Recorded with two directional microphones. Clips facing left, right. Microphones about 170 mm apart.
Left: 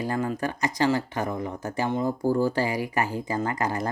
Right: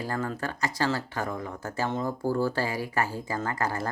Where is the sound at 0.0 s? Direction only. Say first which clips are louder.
Left 4 dB; 15° left (ahead or behind).